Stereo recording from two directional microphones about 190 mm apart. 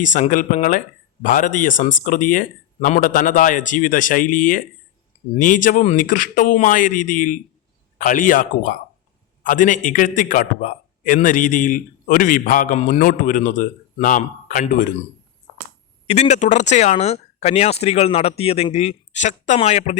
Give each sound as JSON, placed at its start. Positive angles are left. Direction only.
{"t": 0.0, "sound": "a man's voice", "side_deg": 40}
{"t": 16.0, "sound": "speech", "side_deg": 35}